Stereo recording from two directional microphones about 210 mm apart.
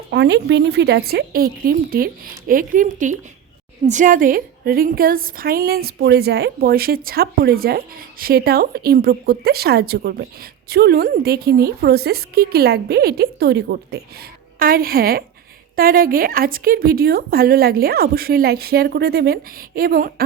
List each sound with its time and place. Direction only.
0.1 s a woman's voice: 55° right (ahead or behind)